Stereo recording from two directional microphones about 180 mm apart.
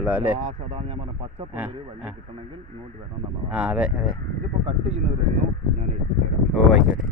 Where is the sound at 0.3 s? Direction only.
35° right (ahead or behind).